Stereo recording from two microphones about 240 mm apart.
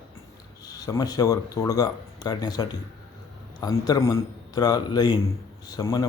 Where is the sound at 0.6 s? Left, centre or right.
Centre.